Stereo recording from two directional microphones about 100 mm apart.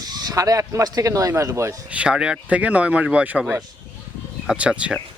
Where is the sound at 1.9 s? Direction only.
10° right (ahead or behind).